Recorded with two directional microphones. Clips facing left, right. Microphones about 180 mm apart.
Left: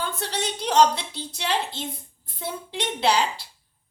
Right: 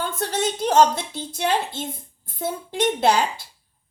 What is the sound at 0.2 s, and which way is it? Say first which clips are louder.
Speech: right 5 dB; 50° right (ahead or behind).